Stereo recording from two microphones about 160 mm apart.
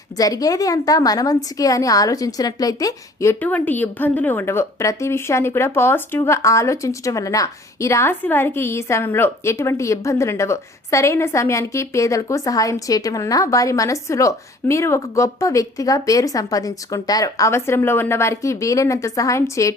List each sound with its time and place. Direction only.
0.2 s a woman's voice: 20° left (ahead or behind)